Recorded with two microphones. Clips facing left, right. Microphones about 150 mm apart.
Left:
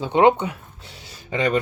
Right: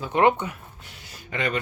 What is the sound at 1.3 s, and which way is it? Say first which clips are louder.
Speech: left 6 dB; 35° left (ahead or behind).